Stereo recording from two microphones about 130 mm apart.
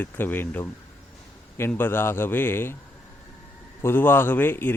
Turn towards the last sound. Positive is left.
turn(degrees=15)  # may be behind; listen again after turning